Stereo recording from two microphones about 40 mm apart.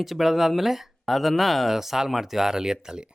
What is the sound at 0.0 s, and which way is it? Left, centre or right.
Speech, centre.